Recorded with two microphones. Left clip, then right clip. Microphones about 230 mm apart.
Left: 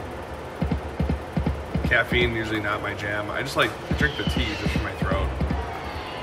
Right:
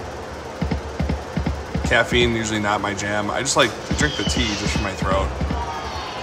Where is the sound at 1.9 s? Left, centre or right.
Centre.